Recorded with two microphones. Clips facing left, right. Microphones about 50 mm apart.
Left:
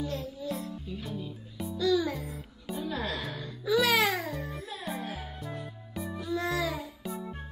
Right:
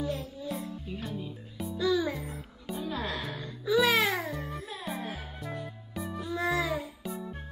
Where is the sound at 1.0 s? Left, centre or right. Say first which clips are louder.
Even; centre.